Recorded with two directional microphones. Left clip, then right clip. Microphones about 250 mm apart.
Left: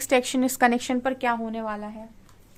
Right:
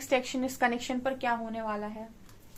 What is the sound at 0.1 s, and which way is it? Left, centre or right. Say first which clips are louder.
A woman's voice: left 7 dB; left.